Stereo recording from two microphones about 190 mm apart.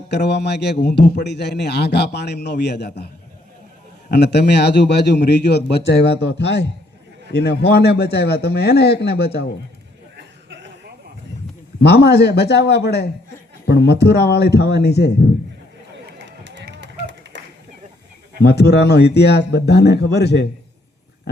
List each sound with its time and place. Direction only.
0.1 s a man's voice: 60° left (ahead or behind)
4.1 s a man's voice: 60° left (ahead or behind)
10.2 s cough: 65° right (ahead or behind)
11.8 s a man's voice: 60° left (ahead or behind)
16.1 s run: 75° right (ahead or behind)
18.4 s a man's voice: 60° left (ahead or behind)